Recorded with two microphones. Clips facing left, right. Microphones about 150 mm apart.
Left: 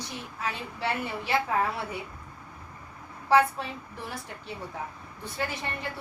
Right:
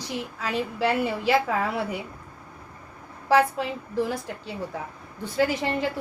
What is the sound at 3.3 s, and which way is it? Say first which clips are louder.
A woman's voice: right 2 dB; 90° right.